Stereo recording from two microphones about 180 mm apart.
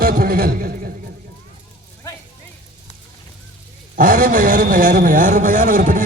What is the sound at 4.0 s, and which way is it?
A man's voice, 50° right (ahead or behind).